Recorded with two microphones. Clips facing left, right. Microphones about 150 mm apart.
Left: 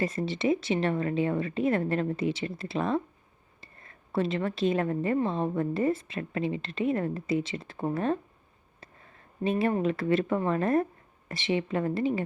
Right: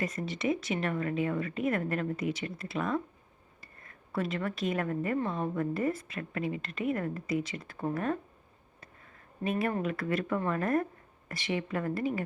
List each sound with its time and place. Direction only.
0.0 s a woman's voice: 30° left (ahead or behind)
4.1 s a woman's voice: 25° left (ahead or behind)
9.4 s a woman's voice: 30° left (ahead or behind)